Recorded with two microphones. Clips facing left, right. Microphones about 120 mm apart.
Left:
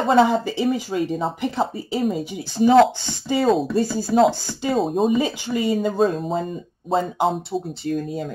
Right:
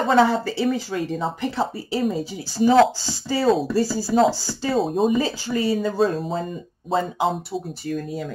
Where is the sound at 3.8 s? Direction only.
20° left (ahead or behind).